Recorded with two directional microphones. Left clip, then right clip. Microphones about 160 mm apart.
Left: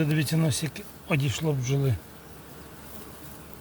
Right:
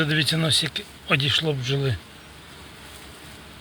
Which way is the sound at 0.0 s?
10° left (ahead or behind).